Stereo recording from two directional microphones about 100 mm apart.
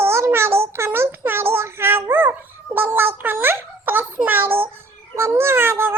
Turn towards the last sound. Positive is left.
turn(degrees=-25)  # may be behind; listen again after turning